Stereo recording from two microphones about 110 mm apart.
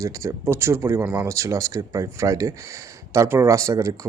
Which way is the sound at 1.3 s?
30° right (ahead or behind).